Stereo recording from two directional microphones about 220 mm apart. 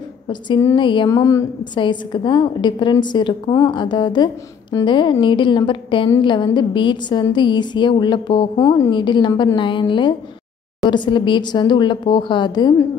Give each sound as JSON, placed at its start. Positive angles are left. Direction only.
{"t": 0.3, "sound": "a woman's voice", "side_deg": 15}